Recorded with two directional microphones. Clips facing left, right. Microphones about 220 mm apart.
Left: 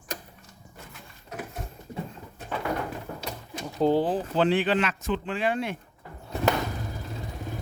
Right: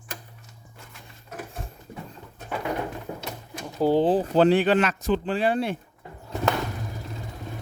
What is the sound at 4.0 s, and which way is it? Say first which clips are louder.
Speech: right 5 dB; 30° right (ahead or behind).